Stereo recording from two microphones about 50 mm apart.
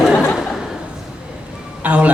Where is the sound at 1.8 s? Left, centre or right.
Right.